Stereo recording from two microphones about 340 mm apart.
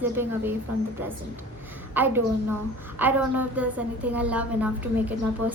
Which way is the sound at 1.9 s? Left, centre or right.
Centre.